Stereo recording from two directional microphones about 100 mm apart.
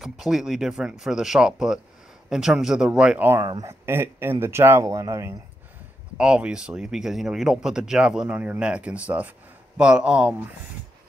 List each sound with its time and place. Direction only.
0.0 s speech: 5° right (ahead or behind)
3.6 s speech: 25° right (ahead or behind)
6.1 s speech: 10° right (ahead or behind)